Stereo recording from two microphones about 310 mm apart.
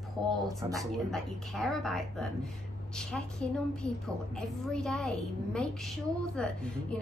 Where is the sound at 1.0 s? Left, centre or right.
Centre.